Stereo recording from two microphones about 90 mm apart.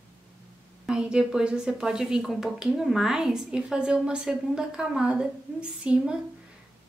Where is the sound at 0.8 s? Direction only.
10° right (ahead or behind).